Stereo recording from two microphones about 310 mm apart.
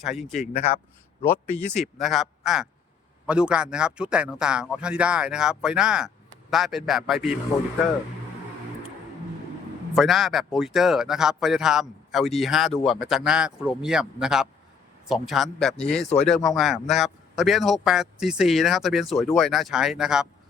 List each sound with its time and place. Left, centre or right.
0.0 s speech: centre
0.5 s speech: left
1.7 s speech: centre
9.9 s speech: centre